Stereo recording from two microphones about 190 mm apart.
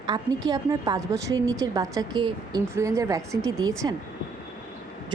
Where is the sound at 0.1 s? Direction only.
20° right (ahead or behind).